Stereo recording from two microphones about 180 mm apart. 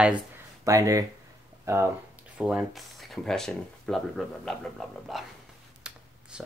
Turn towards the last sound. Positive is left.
turn(degrees=-5)  # may be behind; listen again after turning